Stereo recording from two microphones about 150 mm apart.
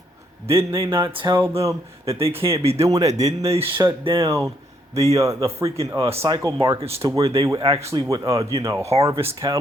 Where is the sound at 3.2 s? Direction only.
45° right (ahead or behind).